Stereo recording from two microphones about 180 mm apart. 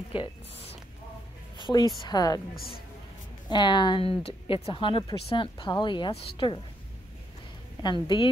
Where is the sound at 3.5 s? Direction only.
25° left (ahead or behind).